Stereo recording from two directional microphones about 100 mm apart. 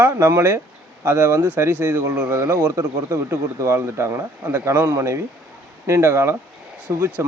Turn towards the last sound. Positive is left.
turn(degrees=-25)  # may be behind; listen again after turning